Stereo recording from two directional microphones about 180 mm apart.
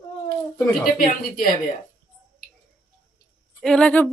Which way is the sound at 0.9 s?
50° left (ahead or behind).